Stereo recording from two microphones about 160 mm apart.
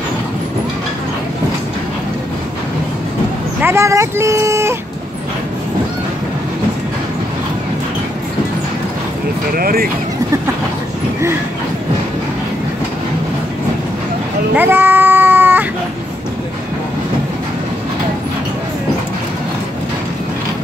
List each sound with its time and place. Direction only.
3.6 s speech: 15° right (ahead or behind)
9.6 s speech: 65° right (ahead or behind)
14.5 s a sound: 10° right (ahead or behind)